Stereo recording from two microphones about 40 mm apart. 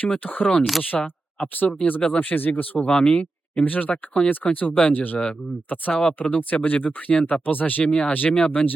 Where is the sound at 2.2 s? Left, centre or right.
Left.